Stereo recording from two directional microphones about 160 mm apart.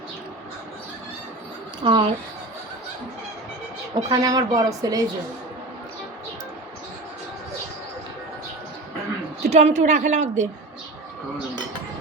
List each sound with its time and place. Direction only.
1.8 s a woman's voice: 35° right (ahead or behind)
3.9 s a woman's voice: 25° right (ahead or behind)
9.5 s a woman's voice: 45° right (ahead or behind)